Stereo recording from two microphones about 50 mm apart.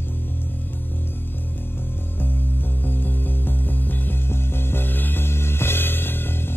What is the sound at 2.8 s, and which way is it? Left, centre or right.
Music, left.